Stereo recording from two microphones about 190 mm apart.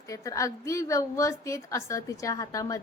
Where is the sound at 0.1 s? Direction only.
15° left (ahead or behind).